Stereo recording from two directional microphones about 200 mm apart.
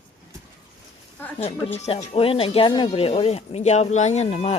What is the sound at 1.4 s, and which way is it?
Speech, 30° left (ahead or behind).